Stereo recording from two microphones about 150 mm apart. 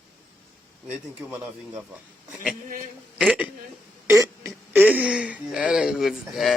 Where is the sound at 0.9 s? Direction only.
10° right (ahead or behind).